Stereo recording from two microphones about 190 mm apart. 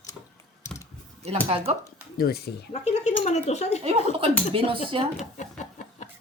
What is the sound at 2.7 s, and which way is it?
Speech, 35° left (ahead or behind).